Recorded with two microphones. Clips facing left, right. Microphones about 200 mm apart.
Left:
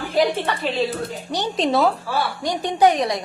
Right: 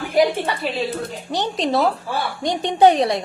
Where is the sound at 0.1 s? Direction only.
15° right (ahead or behind).